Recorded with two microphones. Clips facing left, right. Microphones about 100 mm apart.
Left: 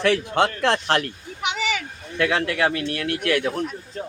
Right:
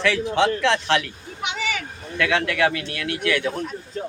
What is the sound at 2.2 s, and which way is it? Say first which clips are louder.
Speech: even; 35° left (ahead or behind).